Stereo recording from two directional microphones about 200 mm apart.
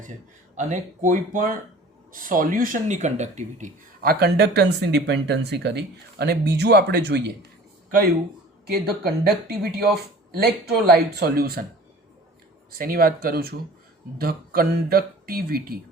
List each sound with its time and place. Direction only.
0.5 s speech: 40° right (ahead or behind); by 7.3 s 55° right (ahead or behind)
8.6 s speech: 50° right (ahead or behind)
12.7 s speech: 45° right (ahead or behind)